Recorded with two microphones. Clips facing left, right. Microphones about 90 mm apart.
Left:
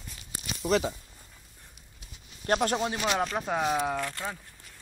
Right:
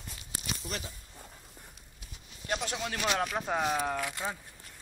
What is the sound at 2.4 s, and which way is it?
Speech, 50° left (ahead or behind).